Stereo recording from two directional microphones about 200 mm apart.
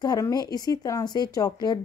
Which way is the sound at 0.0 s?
20° left (ahead or behind).